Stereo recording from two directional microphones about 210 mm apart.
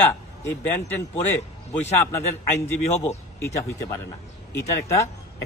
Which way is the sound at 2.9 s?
30° left (ahead or behind).